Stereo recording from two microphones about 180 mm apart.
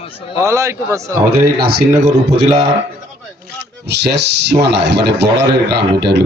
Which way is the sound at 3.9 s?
70° right (ahead or behind).